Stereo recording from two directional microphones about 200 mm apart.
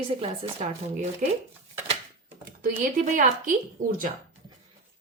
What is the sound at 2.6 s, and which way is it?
Speech, 40° right (ahead or behind).